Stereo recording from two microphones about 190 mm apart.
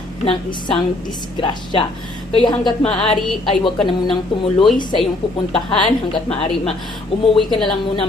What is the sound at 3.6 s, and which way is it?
Speech, 25° left (ahead or behind).